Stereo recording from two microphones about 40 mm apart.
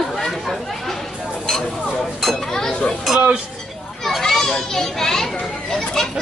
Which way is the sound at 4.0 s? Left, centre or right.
Centre.